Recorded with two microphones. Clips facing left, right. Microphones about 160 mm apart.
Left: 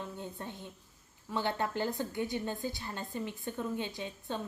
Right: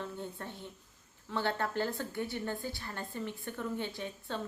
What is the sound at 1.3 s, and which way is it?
A woman's voice, 15° left (ahead or behind).